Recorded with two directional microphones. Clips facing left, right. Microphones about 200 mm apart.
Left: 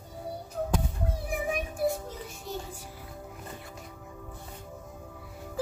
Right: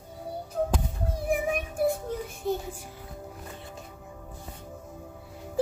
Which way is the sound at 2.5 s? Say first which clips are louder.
Right 9 dB; 55° right (ahead or behind).